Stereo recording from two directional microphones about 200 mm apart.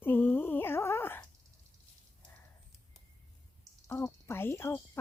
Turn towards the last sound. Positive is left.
turn(degrees=10)  # may be behind; listen again after turning